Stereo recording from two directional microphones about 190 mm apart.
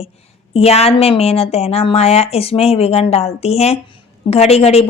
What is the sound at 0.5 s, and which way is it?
A woman's voice, 35° left (ahead or behind).